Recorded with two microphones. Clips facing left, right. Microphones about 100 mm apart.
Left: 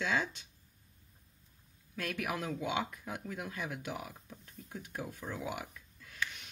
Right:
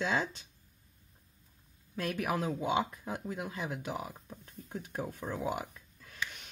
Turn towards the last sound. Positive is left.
turn(degrees=-35)  # may be behind; listen again after turning